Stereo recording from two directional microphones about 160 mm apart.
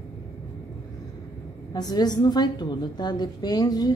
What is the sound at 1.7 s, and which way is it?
A woman's voice, 25° left (ahead or behind).